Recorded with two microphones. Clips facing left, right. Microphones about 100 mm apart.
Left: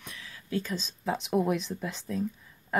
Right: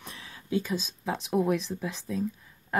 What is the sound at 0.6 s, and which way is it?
Speech, 10° right (ahead or behind).